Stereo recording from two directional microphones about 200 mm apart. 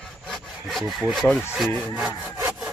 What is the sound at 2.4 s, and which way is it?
Sawing, 15° right (ahead or behind).